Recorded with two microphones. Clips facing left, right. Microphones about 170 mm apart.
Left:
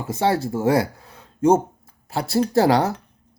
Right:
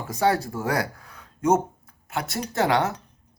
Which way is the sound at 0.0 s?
25° left (ahead or behind).